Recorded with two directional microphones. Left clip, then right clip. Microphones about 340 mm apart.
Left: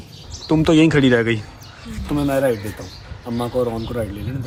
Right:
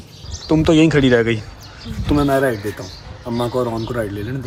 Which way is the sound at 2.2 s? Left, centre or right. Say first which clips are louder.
Right 2 dB; right.